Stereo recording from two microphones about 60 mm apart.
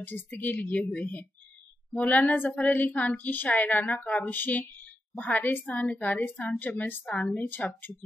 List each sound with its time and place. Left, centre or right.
0.0 s a woman's voice: left
5.7 s a woman's voice: left